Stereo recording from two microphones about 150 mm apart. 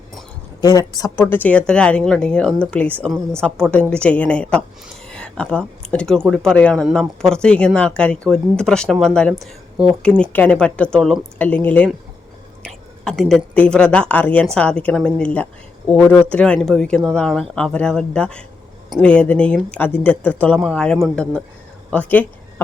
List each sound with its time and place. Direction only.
0.6 s speech: 25° left (ahead or behind)
1.2 s speech: 15° left (ahead or behind)
21.8 s a sound: 10° left (ahead or behind)